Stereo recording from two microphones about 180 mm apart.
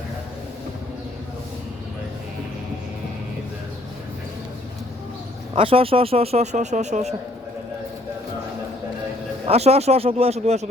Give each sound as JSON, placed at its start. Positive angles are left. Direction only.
{"t": 5.5, "sound": "speech", "side_deg": -30}
{"t": 9.5, "sound": "speech", "side_deg": -35}